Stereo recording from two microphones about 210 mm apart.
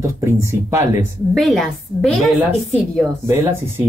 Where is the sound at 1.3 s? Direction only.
Centre (ahead or behind).